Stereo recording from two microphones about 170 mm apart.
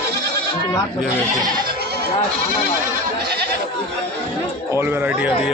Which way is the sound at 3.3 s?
65° right (ahead or behind).